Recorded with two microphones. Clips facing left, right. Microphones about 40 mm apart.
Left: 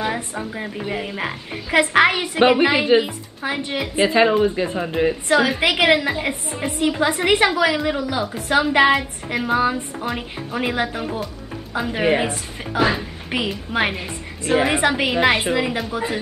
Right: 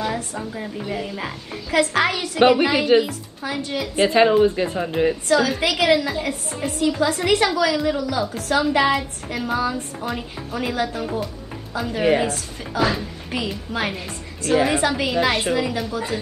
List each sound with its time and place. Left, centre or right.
0.0 s a woman's voice: left
4.1 s speech: centre
5.3 s a woman's voice: left